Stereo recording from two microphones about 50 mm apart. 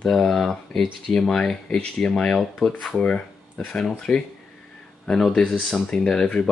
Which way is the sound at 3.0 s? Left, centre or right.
Left.